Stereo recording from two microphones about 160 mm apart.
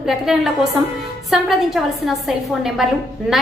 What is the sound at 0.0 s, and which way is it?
A woman's voice, centre (ahead or behind).